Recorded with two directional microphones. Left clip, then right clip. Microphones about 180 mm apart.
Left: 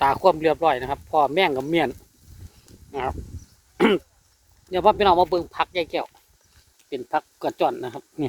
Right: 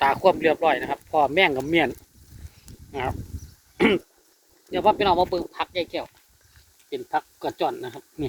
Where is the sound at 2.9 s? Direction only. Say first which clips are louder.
Left 1 dB; 20° left (ahead or behind).